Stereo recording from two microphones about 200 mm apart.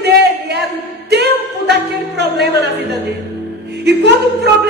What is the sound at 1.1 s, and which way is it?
Music, 55° right (ahead or behind).